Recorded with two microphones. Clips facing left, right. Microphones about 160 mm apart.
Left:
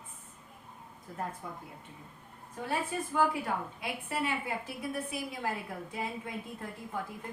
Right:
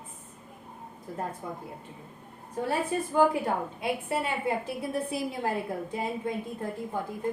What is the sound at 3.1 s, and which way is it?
A woman's voice, 30° right (ahead or behind).